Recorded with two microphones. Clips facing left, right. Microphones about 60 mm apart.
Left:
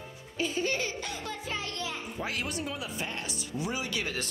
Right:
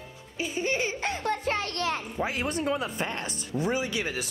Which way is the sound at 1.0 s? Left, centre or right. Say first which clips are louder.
Right 8 dB; right.